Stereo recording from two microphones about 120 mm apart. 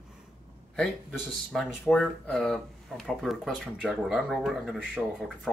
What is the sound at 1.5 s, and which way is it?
Speech, 5° left (ahead or behind).